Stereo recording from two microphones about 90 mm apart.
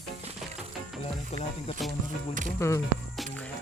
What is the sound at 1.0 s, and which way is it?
Speech, 90° left.